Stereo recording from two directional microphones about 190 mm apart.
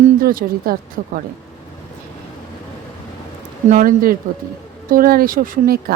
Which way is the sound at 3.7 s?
45° right (ahead or behind).